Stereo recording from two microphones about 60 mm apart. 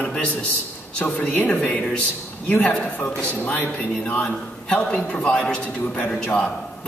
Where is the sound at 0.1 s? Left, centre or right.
Centre.